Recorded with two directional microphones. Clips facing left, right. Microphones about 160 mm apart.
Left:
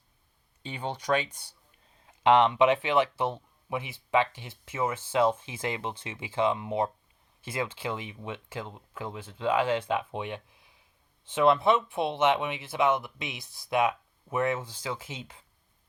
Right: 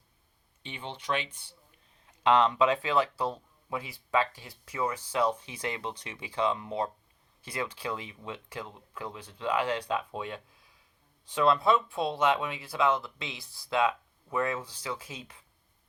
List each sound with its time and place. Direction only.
0.6 s speech: 40° left (ahead or behind)
2.0 s speech: 25° left (ahead or behind)